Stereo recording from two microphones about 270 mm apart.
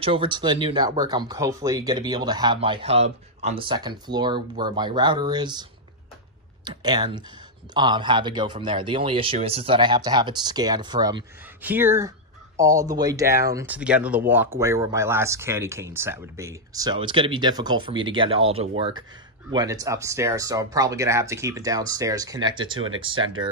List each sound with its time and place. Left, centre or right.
0.0 s speech: centre